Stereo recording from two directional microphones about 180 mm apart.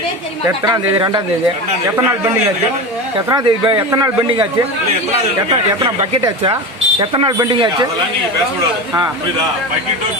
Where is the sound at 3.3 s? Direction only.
25° right (ahead or behind).